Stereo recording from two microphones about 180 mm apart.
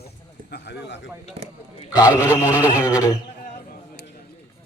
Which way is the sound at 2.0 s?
10° right (ahead or behind).